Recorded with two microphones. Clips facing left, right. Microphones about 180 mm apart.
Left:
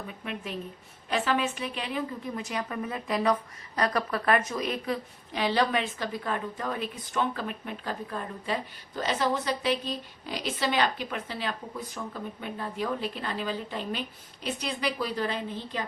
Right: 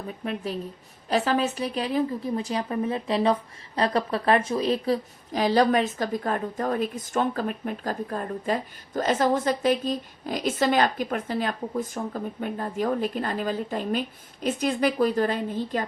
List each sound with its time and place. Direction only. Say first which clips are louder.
1.1 s a woman's voice: right 4 dB; 40° right (ahead or behind)